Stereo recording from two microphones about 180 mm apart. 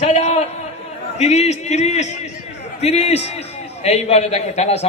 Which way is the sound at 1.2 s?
40° left (ahead or behind).